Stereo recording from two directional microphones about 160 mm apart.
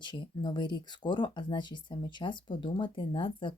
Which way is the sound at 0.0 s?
30° left (ahead or behind).